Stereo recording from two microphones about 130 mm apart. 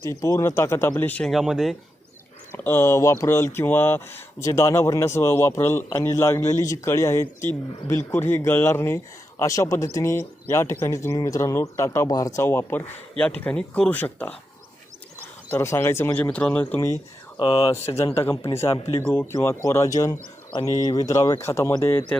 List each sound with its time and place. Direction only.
0.0 s speech: 25° left (ahead or behind)
1.3 s speech: 5° right (ahead or behind)
2.5 s speech: 20° left (ahead or behind)
15.4 s speech: 20° left (ahead or behind)
17.3 s speech: 40° left (ahead or behind)
17.7 s speech: 20° left (ahead or behind)